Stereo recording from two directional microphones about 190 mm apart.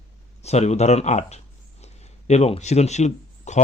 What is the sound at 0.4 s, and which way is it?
Speech, 35° left (ahead or behind).